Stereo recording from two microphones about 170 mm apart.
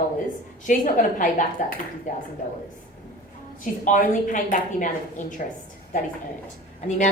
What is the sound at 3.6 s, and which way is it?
A woman's voice, 50° left (ahead or behind).